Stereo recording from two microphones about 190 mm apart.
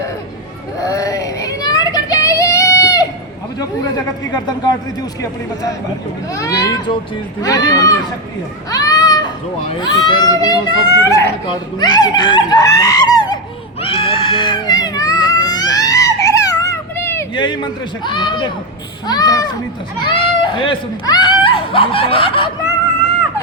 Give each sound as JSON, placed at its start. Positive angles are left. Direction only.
{"t": 0.8, "sound": "child singing", "side_deg": 20}
{"t": 3.6, "sound": "speech", "side_deg": 20}
{"t": 6.3, "sound": "speech", "side_deg": 20}
{"t": 8.7, "sound": "a sound", "side_deg": 20}
{"t": 9.8, "sound": "speech", "side_deg": 25}
{"t": 13.8, "sound": "cat", "side_deg": 30}
{"t": 17.3, "sound": "speech", "side_deg": 25}